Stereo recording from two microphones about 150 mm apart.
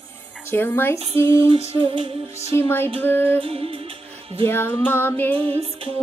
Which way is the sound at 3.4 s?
40° right (ahead or behind).